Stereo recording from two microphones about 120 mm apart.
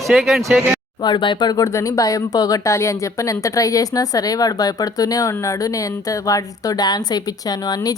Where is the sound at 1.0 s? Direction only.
40° left (ahead or behind).